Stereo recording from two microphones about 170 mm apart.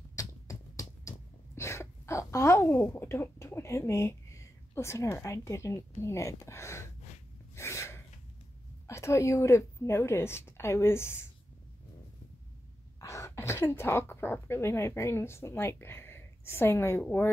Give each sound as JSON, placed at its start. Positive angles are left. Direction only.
{"t": 0.1, "sound": "a sound", "side_deg": 20}
{"t": 7.5, "sound": "sneeze", "side_deg": 15}
{"t": 8.8, "sound": "a woman's voice", "side_deg": 15}
{"t": 13.0, "sound": "speech", "side_deg": 15}